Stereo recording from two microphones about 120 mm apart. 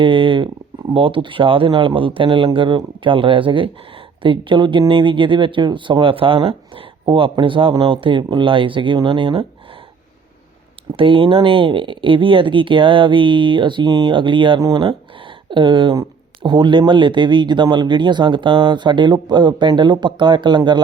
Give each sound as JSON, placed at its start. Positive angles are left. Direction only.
{"t": 0.0, "sound": "speech", "side_deg": -45}
{"t": 10.9, "sound": "speech", "side_deg": -45}